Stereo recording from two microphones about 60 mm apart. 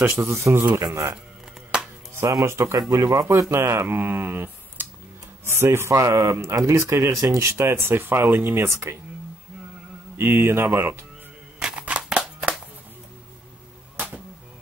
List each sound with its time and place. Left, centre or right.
0.0 s speech: right
0.7 s speech: right
1.7 s music: centre
2.4 s speech: right
3.4 s speech: right
8.6 s speech: right
10.1 s speech: right
11.6 s a sound: centre
13.9 s a sound: right